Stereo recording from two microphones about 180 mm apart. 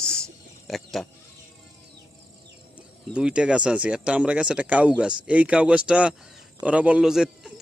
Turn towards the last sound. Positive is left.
turn(degrees=-5)  # may be behind; listen again after turning